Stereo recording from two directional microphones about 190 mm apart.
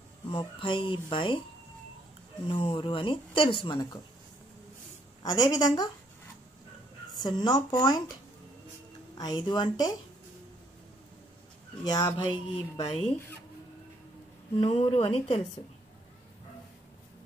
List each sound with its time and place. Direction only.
0.3 s speech: 25° left (ahead or behind)
2.4 s speech: 25° left (ahead or behind)
5.2 s speech: 20° left (ahead or behind)
7.2 s speech: 20° left (ahead or behind)
9.2 s speech: 20° left (ahead or behind)
11.8 s speech: 20° left (ahead or behind)
12.8 s speech: 35° left (ahead or behind)
14.6 s speech: 30° left (ahead or behind)